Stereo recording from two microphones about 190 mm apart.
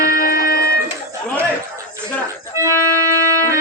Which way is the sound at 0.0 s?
50° left (ahead or behind).